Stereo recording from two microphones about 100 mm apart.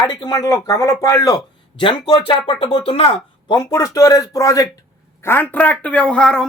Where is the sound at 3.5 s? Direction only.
40° left (ahead or behind).